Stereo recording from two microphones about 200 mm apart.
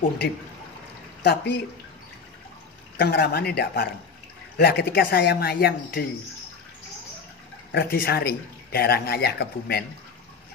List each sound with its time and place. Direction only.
1.2 s speech: 55° left (ahead or behind)
3.0 s a man's voice: 50° left (ahead or behind)
7.7 s a man's voice: 45° left (ahead or behind)